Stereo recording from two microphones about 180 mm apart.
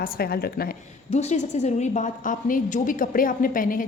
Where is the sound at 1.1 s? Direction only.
40° left (ahead or behind).